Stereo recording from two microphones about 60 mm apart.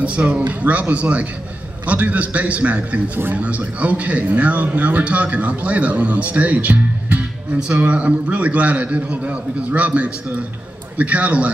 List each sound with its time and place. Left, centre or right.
0.0 s speech: centre
7.5 s speech: centre